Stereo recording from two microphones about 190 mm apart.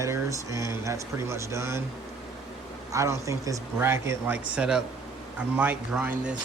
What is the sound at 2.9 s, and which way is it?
Speech, 15° right (ahead or behind).